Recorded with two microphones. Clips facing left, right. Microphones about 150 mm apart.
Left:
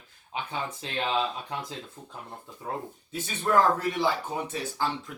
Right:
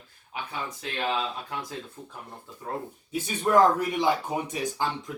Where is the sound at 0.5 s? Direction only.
30° left (ahead or behind).